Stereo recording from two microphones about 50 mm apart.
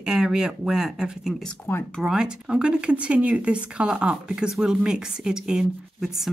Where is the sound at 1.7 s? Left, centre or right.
Left.